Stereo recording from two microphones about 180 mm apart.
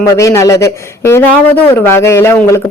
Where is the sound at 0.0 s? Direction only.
15° left (ahead or behind).